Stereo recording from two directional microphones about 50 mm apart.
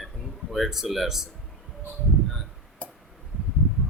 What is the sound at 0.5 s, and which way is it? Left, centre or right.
Speech, centre.